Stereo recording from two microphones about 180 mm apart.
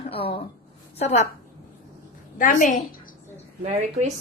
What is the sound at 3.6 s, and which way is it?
Speech, 40° right (ahead or behind).